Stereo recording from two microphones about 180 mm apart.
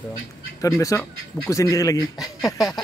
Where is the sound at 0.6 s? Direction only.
20° left (ahead or behind).